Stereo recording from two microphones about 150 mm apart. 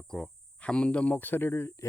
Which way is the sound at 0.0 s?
5° left (ahead or behind).